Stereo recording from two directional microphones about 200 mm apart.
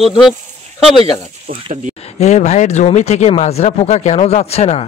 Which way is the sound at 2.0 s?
35° left (ahead or behind).